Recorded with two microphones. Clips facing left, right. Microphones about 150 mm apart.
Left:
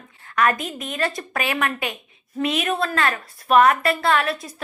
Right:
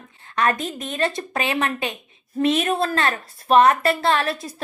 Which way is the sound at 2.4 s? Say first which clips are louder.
Right 3 dB; 35° right (ahead or behind).